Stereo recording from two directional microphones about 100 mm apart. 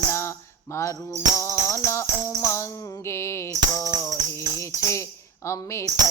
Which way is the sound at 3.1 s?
30° left (ahead or behind).